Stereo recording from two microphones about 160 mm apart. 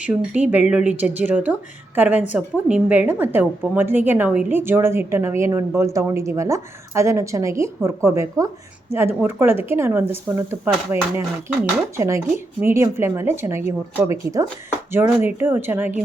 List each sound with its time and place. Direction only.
0.0 s a woman's voice: 10° right (ahead or behind)